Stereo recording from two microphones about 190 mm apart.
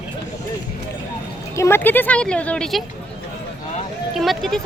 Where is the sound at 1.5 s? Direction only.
15° left (ahead or behind).